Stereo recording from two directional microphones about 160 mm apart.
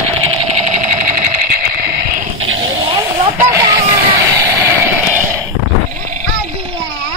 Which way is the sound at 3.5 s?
20° right (ahead or behind).